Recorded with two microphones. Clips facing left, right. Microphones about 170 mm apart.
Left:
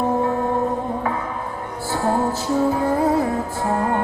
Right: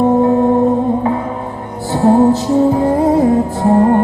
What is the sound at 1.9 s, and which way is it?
Music, 20° right (ahead or behind).